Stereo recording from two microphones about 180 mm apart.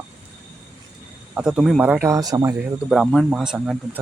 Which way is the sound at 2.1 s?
20° right (ahead or behind).